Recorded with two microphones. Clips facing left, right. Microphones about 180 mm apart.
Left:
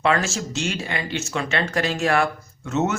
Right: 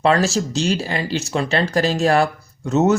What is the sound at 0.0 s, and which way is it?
Speech, 35° right (ahead or behind).